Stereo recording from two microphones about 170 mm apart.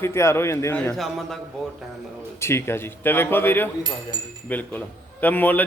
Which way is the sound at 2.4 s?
15° left (ahead or behind).